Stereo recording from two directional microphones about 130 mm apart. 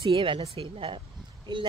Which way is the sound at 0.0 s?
40° right (ahead or behind).